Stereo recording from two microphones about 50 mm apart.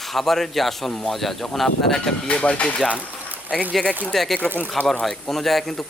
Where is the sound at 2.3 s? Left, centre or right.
Left.